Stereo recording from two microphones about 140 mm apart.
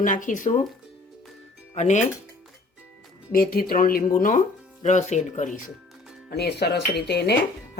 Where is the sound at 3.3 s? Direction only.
90° left.